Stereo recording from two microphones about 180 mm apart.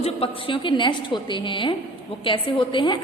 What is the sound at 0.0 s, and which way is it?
A woman's voice, 30° left (ahead or behind).